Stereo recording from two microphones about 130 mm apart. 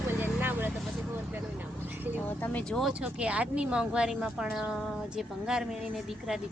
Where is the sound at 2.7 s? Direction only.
5° right (ahead or behind).